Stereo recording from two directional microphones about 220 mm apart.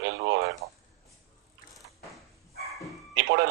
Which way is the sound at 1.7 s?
Centre (ahead or behind).